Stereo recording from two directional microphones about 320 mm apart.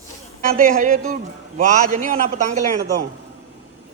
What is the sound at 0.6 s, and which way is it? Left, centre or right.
A man's voice, right.